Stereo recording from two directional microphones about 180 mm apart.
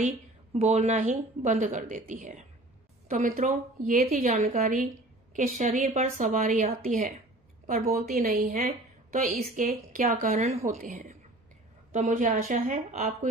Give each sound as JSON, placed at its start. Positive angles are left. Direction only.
{"t": 0.5, "sound": "a woman's voice", "side_deg": -40}
{"t": 7.7, "sound": "speech", "side_deg": -50}